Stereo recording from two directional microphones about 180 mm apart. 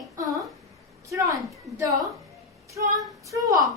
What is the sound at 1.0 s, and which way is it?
A woman's voice, 20° right (ahead or behind).